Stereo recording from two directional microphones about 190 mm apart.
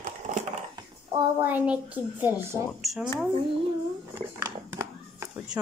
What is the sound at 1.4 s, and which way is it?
Speech, 10° right (ahead or behind).